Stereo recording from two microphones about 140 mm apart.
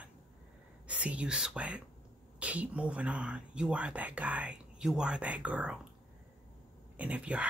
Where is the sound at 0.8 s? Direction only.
10° right (ahead or behind).